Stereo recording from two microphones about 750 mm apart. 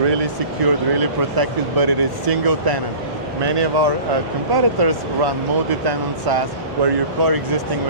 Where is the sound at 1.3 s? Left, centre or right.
Right.